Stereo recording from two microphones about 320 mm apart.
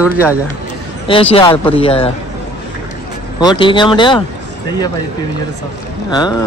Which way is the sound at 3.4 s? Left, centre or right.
Centre.